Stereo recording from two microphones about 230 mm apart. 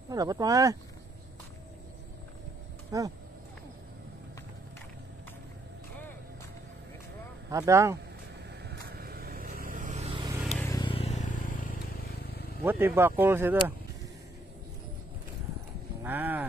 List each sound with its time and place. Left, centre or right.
0.1 s speech: centre
2.9 s speech: centre
7.5 s speech: centre
8.6 s vehicle: right
10.6 s vehicle: centre; by 12.4 s left
12.6 s speech: centre
16.0 s a sound: centre